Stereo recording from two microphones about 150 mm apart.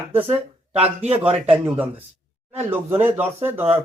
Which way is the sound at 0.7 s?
40° right (ahead or behind).